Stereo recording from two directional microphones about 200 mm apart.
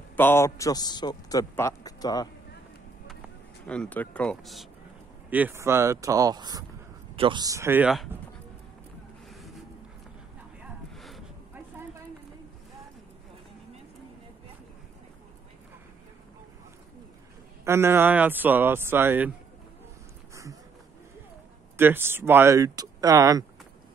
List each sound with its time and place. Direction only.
0.1 s a man's voice: 10° left (ahead or behind)
3.6 s speech: 5° left (ahead or behind)
5.3 s speech: 10° right (ahead or behind)
10.6 s a sound: centre (ahead or behind)
17.6 s speech: 10° right (ahead or behind)
21.7 s speech: 10° right (ahead or behind)